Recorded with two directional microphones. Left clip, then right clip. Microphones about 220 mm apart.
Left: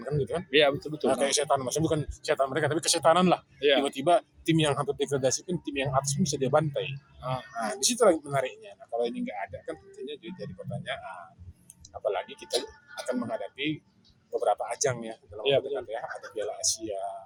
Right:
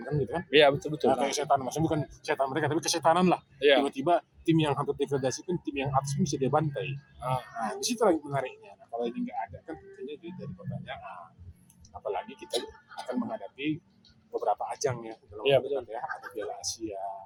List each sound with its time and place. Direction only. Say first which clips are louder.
0.0 s speech: left 1 dB; 15° left (ahead or behind)
0.5 s speech: right 2 dB; 30° right (ahead or behind)
1.0 s speech: left 1 dB; 15° left (ahead or behind)
3.6 s speech: right 2 dB; 25° right (ahead or behind)
3.8 s speech: left 3 dB; 10° left (ahead or behind)
7.2 s speech: right 2 dB; 25° right (ahead or behind)
7.6 s speech: left 4 dB; 10° left (ahead or behind)
12.5 s speech: left 2 dB; 30° left (ahead or behind)
13.1 s speech: left 3 dB; 15° left (ahead or behind)